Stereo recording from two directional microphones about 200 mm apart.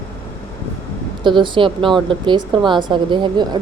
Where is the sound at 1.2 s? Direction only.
25° right (ahead or behind).